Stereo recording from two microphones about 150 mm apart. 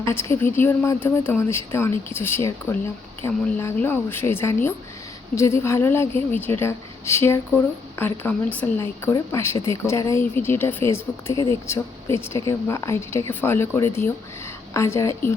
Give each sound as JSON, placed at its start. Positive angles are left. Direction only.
{"t": 0.0, "sound": "a woman's voice", "side_deg": 15}